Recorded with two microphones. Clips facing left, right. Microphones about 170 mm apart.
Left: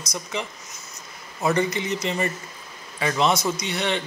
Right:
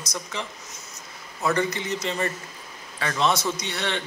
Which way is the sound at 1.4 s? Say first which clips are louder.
Left 2 dB; 20° left (ahead or behind).